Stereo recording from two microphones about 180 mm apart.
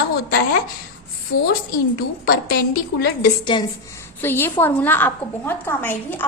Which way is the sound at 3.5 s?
25° left (ahead or behind).